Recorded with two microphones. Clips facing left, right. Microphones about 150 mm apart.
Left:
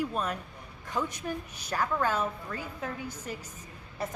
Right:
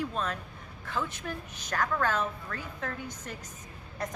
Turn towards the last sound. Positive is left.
turn(degrees=5)  # may be behind; listen again after turning